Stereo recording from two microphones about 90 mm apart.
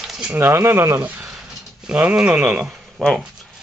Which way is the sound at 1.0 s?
20° right (ahead or behind).